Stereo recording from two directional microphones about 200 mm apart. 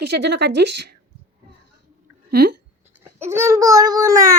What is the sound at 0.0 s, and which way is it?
Speech, 55° right (ahead or behind).